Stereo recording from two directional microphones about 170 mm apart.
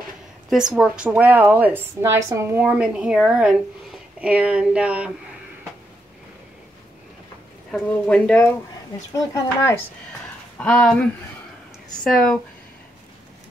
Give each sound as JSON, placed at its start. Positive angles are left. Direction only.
{"t": 0.7, "sound": "a woman's voice", "side_deg": -5}
{"t": 7.7, "sound": "speech", "side_deg": 5}
{"t": 9.1, "sound": "speech", "side_deg": 20}
{"t": 10.6, "sound": "speech", "side_deg": 5}